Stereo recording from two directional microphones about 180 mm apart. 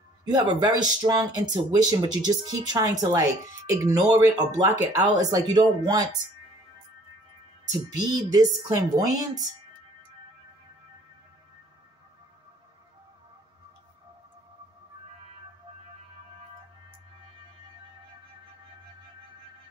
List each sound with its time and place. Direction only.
0.2 s speech: 20° right (ahead or behind)
8.1 s speech: 20° right (ahead or behind)